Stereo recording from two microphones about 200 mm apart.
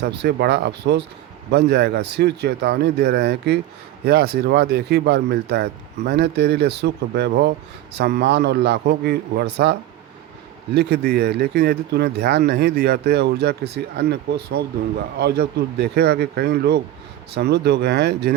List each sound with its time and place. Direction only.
0.0 s speech: 55° right (ahead or behind)
10.8 s speech: 55° right (ahead or behind)